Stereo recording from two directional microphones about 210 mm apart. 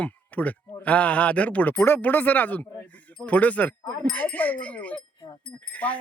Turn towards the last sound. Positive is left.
turn(degrees=5)  # may be behind; listen again after turning